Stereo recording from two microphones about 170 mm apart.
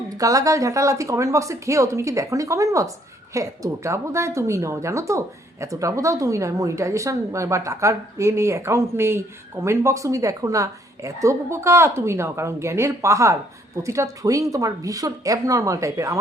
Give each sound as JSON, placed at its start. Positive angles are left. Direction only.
{"t": 0.2, "sound": "a woman's voice", "side_deg": -20}